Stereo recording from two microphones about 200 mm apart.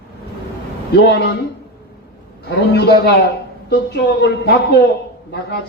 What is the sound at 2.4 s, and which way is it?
A man's voice, 55° left (ahead or behind).